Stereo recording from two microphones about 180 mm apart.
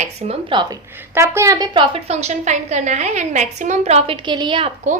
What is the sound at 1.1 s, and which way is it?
A woman's voice, 15° right (ahead or behind).